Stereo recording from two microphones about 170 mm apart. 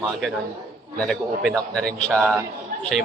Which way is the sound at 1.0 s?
5° left (ahead or behind).